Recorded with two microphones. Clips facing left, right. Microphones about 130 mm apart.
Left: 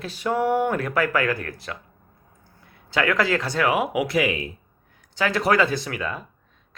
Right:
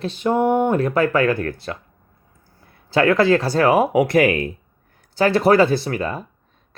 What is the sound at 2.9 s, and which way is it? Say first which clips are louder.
Speech: right 7 dB; 30° right (ahead or behind).